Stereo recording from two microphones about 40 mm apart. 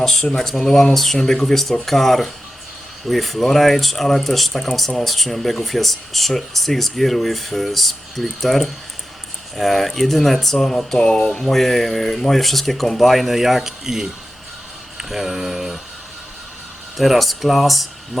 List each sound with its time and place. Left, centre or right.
0.0 s speech: centre
0.9 s speech: centre
11.5 s speech: centre
15.1 s speech: centre
17.0 s speech: centre